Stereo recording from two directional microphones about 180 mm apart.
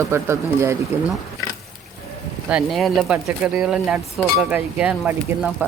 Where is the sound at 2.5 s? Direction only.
Centre (ahead or behind).